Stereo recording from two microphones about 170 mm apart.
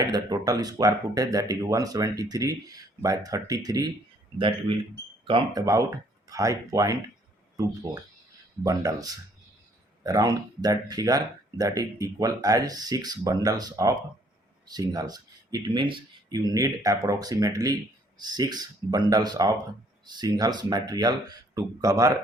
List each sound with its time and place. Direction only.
0.1 s speech: 25° right (ahead or behind)
5.2 s speech: 30° right (ahead or behind)
5.6 s speech: 20° right (ahead or behind)